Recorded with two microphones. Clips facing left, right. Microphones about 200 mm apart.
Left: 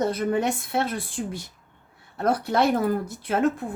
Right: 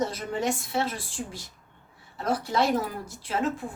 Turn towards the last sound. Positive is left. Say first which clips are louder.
# left 5 dB
turn(degrees=60)  # may be behind; listen again after turning